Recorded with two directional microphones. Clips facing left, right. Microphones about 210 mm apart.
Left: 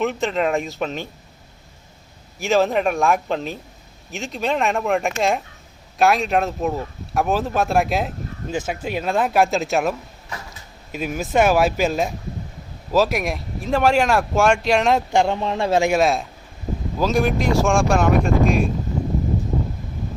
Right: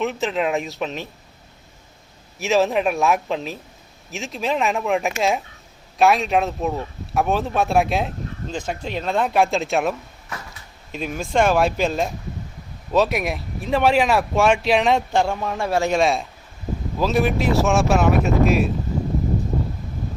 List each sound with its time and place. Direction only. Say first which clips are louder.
0.0 s speech: left 1 dB; centre (ahead or behind)
2.4 s speech: even; centre (ahead or behind)
10.9 s speech: left 1 dB; 5° left (ahead or behind)
15.1 s a man's voice: left 2 dB; 20° left (ahead or behind)
15.9 s speech: left 1 dB; centre (ahead or behind)